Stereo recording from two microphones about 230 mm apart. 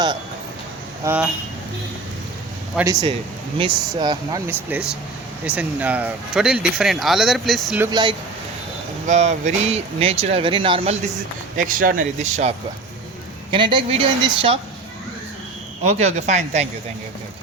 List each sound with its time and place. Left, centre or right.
1.0 s speech: centre
2.7 s speech: centre
7.9 s speech: centre
9.0 s speech: right
11.5 s speech: right
15.8 s speech: right